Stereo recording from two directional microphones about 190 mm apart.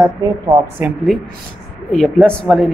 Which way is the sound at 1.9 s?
5° left (ahead or behind).